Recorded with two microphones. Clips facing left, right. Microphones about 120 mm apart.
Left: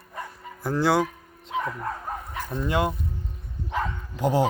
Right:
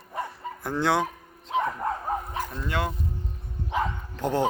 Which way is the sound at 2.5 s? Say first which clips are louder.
Left 7 dB; 20° left (ahead or behind).